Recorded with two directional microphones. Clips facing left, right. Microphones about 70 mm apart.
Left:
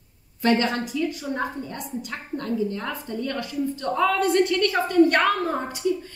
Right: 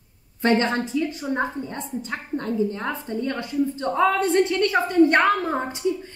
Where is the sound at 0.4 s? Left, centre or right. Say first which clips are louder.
Right 1 dB; right.